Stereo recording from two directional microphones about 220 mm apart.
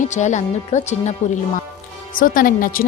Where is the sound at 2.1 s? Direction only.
40° left (ahead or behind).